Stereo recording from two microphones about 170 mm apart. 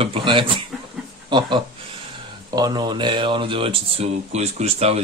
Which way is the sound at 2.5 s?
25° right (ahead or behind).